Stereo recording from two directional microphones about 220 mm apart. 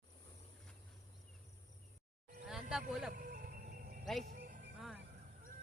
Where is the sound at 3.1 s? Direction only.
40° right (ahead or behind).